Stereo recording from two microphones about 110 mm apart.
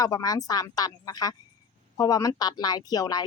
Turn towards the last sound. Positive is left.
turn(degrees=35)  # may be behind; listen again after turning